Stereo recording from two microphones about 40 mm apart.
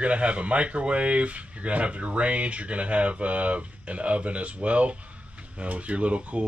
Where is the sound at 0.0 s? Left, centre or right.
Right.